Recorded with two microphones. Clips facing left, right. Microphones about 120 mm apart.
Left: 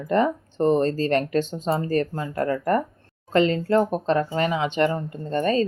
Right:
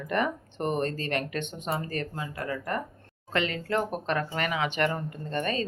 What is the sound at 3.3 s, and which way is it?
Speech, 30° left (ahead or behind).